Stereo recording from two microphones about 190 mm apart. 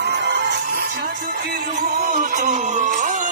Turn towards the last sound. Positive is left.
turn(degrees=-40)  # may be behind; listen again after turning